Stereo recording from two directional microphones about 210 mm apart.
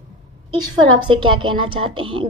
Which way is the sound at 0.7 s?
20° right (ahead or behind).